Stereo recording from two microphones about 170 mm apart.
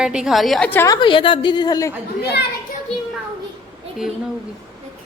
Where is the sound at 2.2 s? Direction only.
75° left (ahead or behind).